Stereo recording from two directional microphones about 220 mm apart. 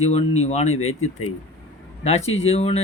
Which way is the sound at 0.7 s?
70° left (ahead or behind).